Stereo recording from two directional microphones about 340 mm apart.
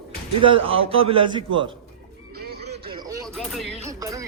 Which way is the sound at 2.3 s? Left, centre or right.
Right.